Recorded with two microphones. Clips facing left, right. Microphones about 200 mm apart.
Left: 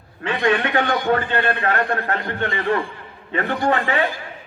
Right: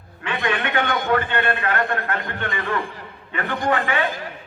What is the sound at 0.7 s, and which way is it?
A man's voice, 40° left (ahead or behind).